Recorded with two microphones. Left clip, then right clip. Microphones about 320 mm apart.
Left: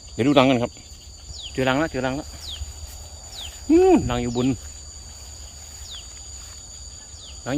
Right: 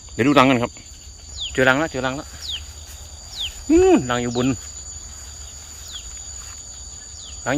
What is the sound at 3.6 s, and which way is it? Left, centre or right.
Cricket, centre.